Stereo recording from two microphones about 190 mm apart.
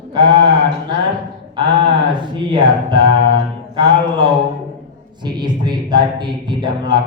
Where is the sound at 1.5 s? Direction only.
25° right (ahead or behind).